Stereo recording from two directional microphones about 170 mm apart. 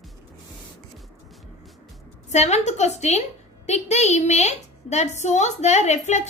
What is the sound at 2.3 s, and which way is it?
A woman's voice, 40° left (ahead or behind).